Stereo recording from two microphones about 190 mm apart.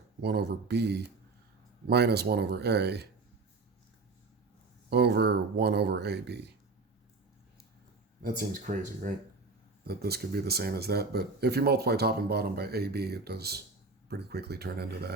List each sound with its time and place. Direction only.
0.2 s speech: 60° right (ahead or behind)
4.9 s speech: 60° right (ahead or behind)
8.2 s speech: 45° right (ahead or behind)
9.8 s speech: 55° right (ahead or behind)